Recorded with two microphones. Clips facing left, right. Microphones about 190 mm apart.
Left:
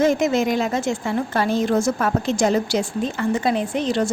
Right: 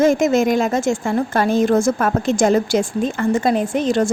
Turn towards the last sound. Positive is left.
turn(degrees=-45)  # may be behind; listen again after turning